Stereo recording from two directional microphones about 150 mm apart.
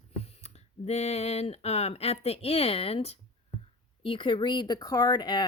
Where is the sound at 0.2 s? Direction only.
45° left (ahead or behind).